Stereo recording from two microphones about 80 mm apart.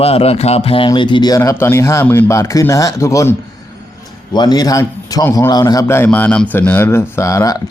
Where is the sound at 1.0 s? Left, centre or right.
Left.